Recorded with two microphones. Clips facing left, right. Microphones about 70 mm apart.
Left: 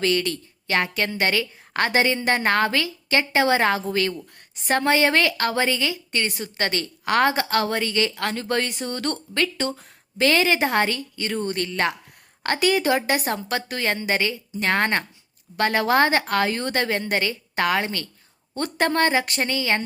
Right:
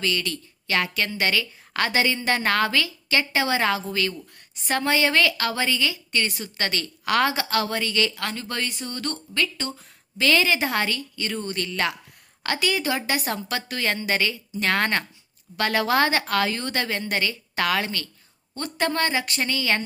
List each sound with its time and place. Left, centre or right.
0.0 s a woman's voice: left
8.1 s speech: left
10.2 s a woman's voice: left
18.5 s a woman's voice: left